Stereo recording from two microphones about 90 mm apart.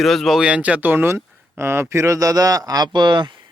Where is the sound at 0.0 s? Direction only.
Centre (ahead or behind).